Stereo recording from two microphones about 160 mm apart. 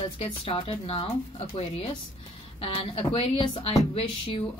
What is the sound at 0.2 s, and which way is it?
Speech, 35° left (ahead or behind).